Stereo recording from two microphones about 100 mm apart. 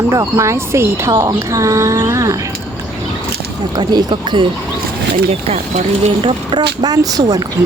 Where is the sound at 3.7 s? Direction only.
45° right (ahead or behind).